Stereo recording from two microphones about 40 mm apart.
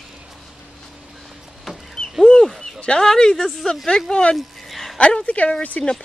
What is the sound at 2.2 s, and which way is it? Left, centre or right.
Speech, centre.